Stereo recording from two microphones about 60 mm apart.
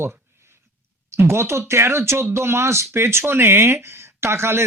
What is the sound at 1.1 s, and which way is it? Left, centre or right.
Speech, right.